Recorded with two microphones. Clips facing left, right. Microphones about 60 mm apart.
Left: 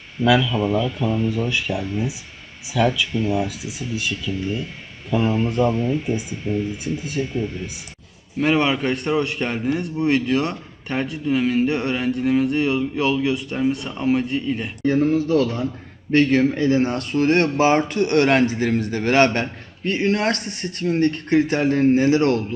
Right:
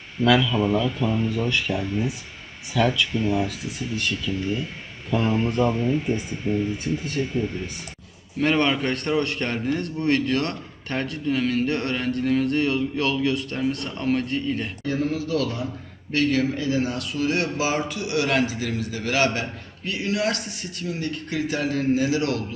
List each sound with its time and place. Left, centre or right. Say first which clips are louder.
0.3 s speech: left 1 dB; centre
1.5 s a man's voice: left 1 dB; centre
6.5 s speech: left 1 dB; right
6.8 s a man's voice: left 1 dB; centre
14.8 s speech: left 8 dB; left